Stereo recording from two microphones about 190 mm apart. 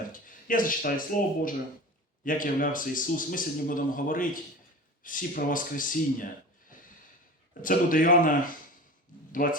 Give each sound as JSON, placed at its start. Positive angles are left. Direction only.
{"t": 0.1, "sound": "a man's voice", "side_deg": 45}
{"t": 7.6, "sound": "a man's voice", "side_deg": 45}